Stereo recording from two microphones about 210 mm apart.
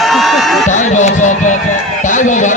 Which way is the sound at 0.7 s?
35° left (ahead or behind).